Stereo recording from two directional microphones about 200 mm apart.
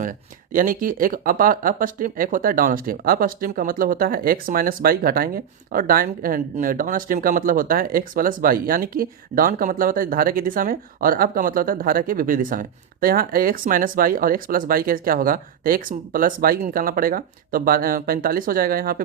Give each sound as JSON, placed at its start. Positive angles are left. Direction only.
{"t": 0.0, "sound": "speech", "side_deg": -45}